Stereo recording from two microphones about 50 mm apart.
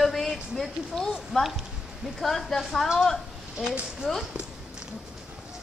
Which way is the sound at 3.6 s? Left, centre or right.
Centre.